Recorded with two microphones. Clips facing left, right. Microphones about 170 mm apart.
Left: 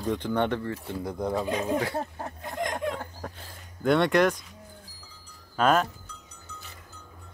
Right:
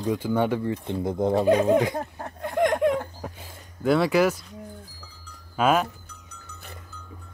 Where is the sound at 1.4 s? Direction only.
70° right (ahead or behind).